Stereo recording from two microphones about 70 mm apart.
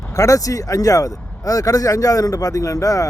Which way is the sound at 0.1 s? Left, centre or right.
Left.